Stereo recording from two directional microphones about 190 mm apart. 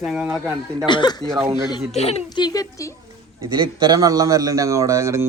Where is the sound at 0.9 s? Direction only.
25° left (ahead or behind).